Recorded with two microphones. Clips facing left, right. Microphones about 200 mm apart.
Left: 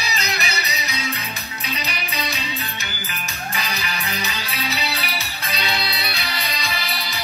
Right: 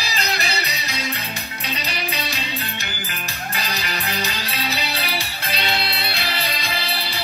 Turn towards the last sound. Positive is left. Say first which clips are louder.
# right 1 dB
turn(degrees=-30)  # may be behind; listen again after turning